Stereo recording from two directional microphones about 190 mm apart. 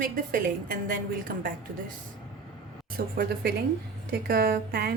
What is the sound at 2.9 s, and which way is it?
A woman's voice, 55° right (ahead or behind).